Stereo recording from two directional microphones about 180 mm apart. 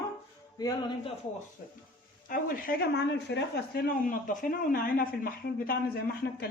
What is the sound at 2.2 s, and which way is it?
Speech, 50° left (ahead or behind).